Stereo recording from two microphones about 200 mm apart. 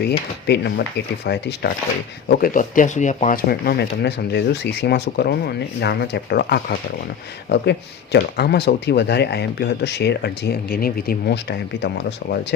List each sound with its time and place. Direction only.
0.4 s speech: 55° left (ahead or behind)